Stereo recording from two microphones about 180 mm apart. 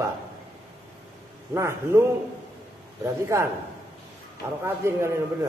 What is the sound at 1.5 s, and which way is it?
Speech, 15° right (ahead or behind).